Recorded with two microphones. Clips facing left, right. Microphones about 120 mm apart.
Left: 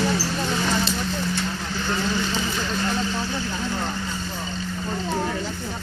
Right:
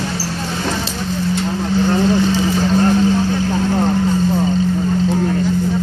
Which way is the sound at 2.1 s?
40° right (ahead or behind).